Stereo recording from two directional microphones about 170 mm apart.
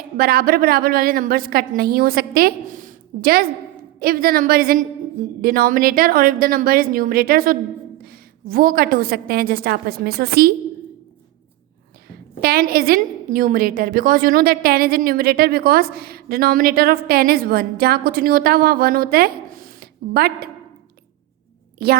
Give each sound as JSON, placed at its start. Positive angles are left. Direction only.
{"t": 0.2, "sound": "a woman's voice", "side_deg": -60}
{"t": 12.0, "sound": "a woman's voice", "side_deg": -65}
{"t": 21.8, "sound": "a woman's voice", "side_deg": -65}